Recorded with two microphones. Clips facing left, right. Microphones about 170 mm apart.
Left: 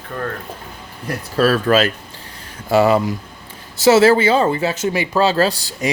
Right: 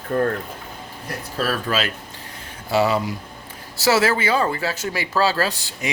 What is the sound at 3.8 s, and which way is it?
Speech, 25° left (ahead or behind).